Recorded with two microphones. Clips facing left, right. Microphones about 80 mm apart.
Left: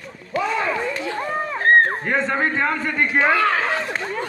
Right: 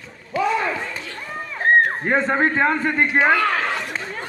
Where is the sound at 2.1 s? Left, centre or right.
Centre.